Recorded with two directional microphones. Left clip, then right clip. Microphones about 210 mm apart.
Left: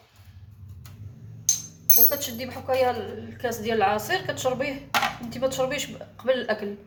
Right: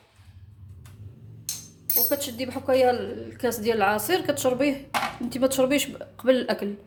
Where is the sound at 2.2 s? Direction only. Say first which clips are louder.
Right 2 dB; 50° right (ahead or behind).